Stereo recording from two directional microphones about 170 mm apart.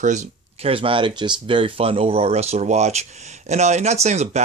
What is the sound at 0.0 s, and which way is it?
Speech, 45° right (ahead or behind).